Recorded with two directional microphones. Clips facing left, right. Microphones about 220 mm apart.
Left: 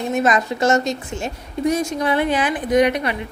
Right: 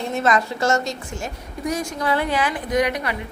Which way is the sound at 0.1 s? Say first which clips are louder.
Left 2 dB; 20° left (ahead or behind).